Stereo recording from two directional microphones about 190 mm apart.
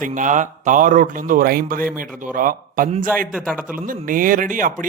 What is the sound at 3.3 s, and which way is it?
Speech, 5° right (ahead or behind).